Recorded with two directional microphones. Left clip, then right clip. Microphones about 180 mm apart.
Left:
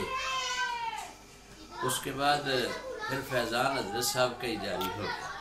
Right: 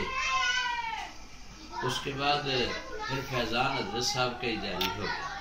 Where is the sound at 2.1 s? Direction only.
25° left (ahead or behind).